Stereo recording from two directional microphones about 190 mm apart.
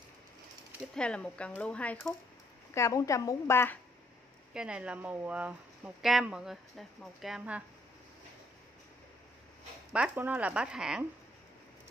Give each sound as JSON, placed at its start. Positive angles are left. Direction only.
{"t": 0.9, "sound": "a woman's voice", "side_deg": 5}
{"t": 2.7, "sound": "a woman's voice", "side_deg": 15}
{"t": 4.6, "sound": "a woman's voice", "side_deg": -5}
{"t": 9.9, "sound": "a woman's voice", "side_deg": -10}